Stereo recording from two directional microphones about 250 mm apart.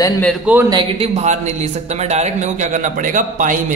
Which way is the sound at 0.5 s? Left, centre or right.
Centre.